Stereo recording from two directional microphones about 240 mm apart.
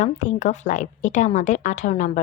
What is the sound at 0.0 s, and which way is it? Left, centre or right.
A woman's voice, left.